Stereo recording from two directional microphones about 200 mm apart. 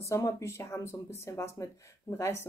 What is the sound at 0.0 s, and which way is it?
Speech, 15° left (ahead or behind).